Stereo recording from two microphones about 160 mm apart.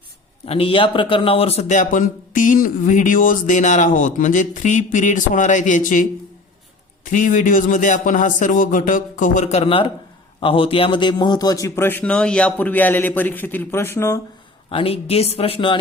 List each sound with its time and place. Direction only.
0.4 s a man's voice: 35° left (ahead or behind); by 14.2 s 15° left (ahead or behind)
14.7 s speech: 35° left (ahead or behind)